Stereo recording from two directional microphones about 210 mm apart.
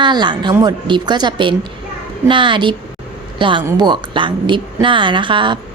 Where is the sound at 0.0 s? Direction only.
20° right (ahead or behind).